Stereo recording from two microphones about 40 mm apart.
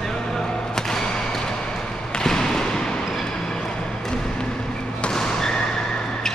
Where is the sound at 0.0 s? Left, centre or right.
Centre.